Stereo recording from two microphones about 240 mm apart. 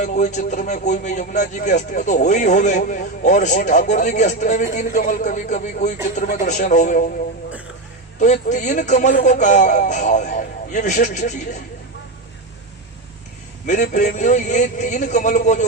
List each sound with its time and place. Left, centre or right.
0.0 s speech: left
8.2 s speech: left
13.8 s speech: left